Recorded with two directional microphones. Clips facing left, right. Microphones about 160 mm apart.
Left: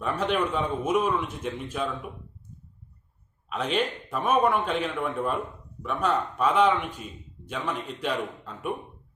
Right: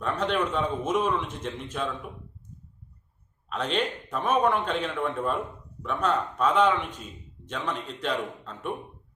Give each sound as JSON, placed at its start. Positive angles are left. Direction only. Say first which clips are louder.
{"t": 0.0, "sound": "a man's voice", "louder": "left 1 dB", "side_deg": 5}
{"t": 3.5, "sound": "a man's voice", "louder": "left 1 dB", "side_deg": 5}